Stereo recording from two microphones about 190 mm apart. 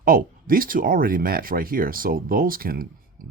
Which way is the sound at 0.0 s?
50° right (ahead or behind).